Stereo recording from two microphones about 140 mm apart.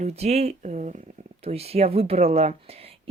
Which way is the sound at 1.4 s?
45° right (ahead or behind).